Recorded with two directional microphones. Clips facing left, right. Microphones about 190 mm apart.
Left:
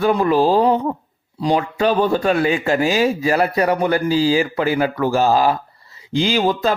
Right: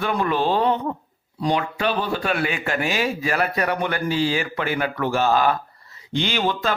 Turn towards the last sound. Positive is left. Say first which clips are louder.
# left 6 dB
turn(degrees=35)  # may be behind; listen again after turning